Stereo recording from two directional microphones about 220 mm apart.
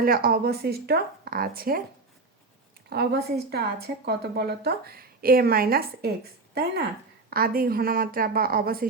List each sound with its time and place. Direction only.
0.0 s a woman's voice: 40° right (ahead or behind)
2.9 s a woman's voice: 45° right (ahead or behind)